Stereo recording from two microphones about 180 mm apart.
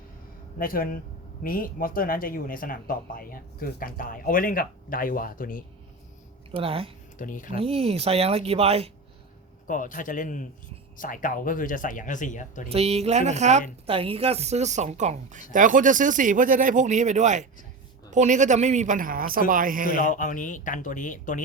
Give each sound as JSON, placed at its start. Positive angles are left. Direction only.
{"t": 0.6, "sound": "speech", "side_deg": 55}
{"t": 6.5, "sound": "speech", "side_deg": -30}
{"t": 7.2, "sound": "speech", "side_deg": 45}
{"t": 7.5, "sound": "speech", "side_deg": -30}
{"t": 9.6, "sound": "speech", "side_deg": 45}
{"t": 12.6, "sound": "a woman's voice", "side_deg": -35}
{"t": 20.1, "sound": "speech", "side_deg": 45}